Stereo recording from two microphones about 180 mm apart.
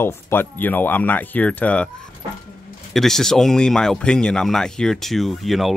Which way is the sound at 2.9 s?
Centre (ahead or behind).